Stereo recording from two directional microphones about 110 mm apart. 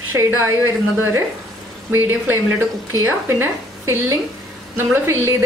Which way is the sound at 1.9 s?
20° right (ahead or behind).